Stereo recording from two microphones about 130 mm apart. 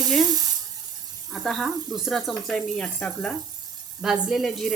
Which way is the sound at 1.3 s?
Centre (ahead or behind).